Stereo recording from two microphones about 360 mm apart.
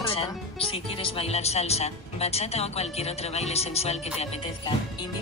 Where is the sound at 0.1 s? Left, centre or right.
Centre.